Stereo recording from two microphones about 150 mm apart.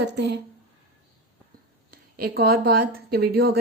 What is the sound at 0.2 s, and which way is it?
Speech, 90° right.